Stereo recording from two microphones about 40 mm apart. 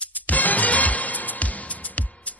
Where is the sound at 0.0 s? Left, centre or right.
Left.